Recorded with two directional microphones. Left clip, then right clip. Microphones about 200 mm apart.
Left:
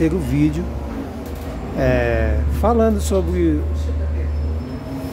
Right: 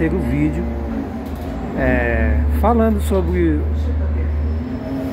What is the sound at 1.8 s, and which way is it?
Speech, 30° left (ahead or behind).